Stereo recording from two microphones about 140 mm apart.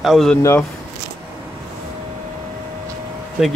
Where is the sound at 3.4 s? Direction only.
5° right (ahead or behind).